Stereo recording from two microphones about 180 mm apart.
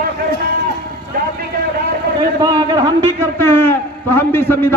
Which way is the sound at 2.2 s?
25° right (ahead or behind).